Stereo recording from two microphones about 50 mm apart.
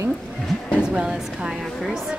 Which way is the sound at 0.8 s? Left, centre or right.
Centre.